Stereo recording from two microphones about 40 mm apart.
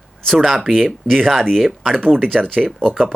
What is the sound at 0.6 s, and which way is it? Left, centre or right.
Speech, centre.